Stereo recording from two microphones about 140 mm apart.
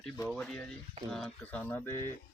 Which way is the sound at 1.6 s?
20° left (ahead or behind).